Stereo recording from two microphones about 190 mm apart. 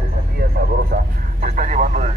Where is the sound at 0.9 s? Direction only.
40° right (ahead or behind).